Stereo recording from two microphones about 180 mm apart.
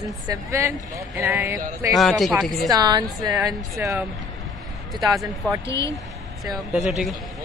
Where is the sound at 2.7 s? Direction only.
25° right (ahead or behind).